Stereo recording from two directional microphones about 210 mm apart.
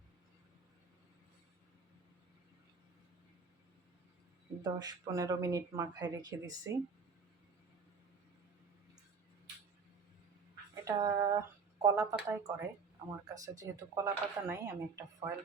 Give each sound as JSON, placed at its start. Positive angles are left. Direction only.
{"t": 4.6, "sound": "speech", "side_deg": -20}
{"t": 10.8, "sound": "speech", "side_deg": -15}